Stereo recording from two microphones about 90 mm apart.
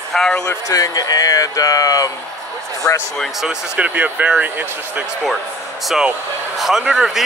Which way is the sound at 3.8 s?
15° right (ahead or behind).